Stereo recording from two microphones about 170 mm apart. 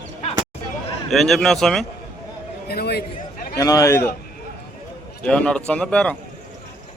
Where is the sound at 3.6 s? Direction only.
20° left (ahead or behind).